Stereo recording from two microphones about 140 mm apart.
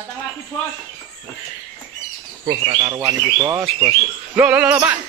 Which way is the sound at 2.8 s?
25° right (ahead or behind).